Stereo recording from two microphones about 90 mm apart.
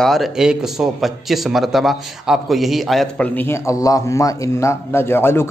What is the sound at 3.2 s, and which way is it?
Speech, 25° left (ahead or behind).